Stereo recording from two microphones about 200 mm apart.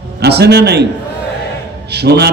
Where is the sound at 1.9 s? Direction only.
55° right (ahead or behind).